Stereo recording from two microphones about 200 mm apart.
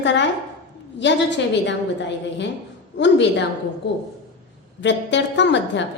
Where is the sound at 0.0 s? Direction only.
60° left (ahead or behind).